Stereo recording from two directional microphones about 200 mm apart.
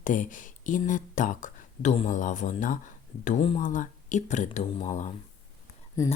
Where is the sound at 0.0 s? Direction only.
40° left (ahead or behind).